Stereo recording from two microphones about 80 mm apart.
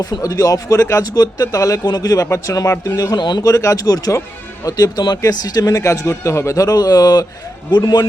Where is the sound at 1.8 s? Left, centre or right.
Left.